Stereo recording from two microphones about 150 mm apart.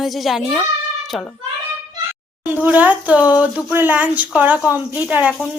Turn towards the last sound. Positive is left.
turn(degrees=-10)  # may be behind; listen again after turning